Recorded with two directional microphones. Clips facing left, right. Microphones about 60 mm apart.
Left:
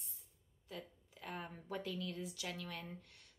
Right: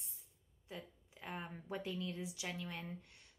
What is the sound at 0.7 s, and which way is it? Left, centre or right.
Speech, right.